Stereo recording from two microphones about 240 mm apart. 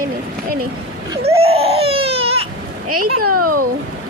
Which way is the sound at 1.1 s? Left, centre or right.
Centre.